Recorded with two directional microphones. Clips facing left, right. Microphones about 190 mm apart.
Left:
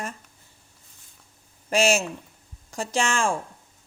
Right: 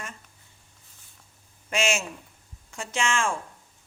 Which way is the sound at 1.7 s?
35° left (ahead or behind).